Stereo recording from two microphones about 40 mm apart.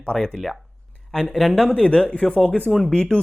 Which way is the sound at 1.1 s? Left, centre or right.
Centre.